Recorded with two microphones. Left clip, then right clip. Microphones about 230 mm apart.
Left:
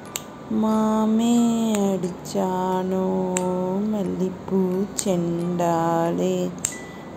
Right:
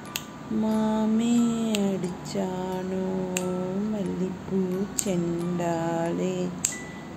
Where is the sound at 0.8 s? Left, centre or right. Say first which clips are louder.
Left 4 dB; centre.